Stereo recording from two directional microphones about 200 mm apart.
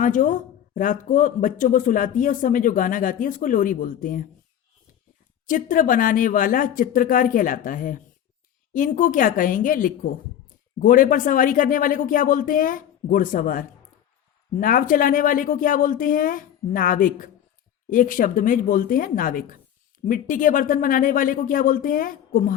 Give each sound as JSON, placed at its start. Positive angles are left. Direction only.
{"t": 0.0, "sound": "speech", "side_deg": 40}
{"t": 5.5, "sound": "speech", "side_deg": 40}